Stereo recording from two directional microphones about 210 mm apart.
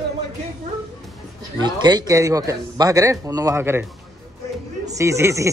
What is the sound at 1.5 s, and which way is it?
A man's voice, 20° right (ahead or behind).